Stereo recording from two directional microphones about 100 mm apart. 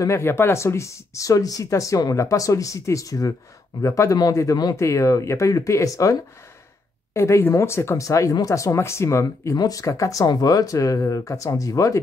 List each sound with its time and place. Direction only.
0.0 s speech: 25° left (ahead or behind)
7.2 s speech: 30° left (ahead or behind)